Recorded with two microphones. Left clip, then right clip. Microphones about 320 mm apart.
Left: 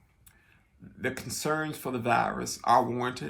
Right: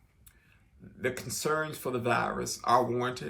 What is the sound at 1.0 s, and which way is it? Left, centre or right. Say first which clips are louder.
Speech: even; centre.